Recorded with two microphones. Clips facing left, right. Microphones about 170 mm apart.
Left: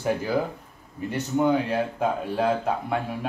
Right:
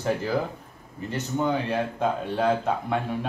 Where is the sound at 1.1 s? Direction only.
5° left (ahead or behind).